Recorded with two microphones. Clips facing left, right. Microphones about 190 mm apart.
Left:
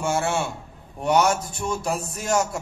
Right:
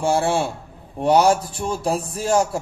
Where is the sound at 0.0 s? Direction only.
30° right (ahead or behind).